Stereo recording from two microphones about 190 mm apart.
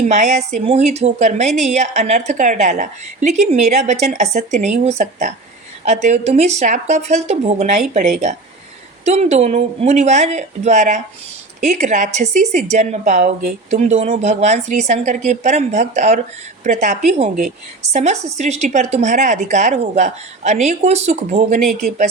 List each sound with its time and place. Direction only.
0.0 s a woman's voice: 40° right (ahead or behind)